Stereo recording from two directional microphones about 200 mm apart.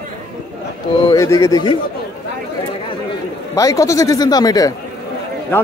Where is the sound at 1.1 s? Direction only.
15° left (ahead or behind).